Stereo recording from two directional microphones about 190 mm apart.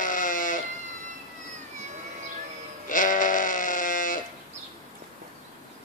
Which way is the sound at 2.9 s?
45° left (ahead or behind).